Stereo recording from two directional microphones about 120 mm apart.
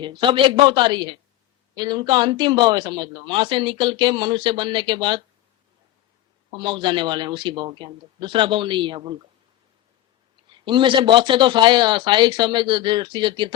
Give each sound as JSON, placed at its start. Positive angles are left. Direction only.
{"t": 0.0, "sound": "a man's voice", "side_deg": -45}
{"t": 6.5, "sound": "a man's voice", "side_deg": -45}
{"t": 10.5, "sound": "speech", "side_deg": -40}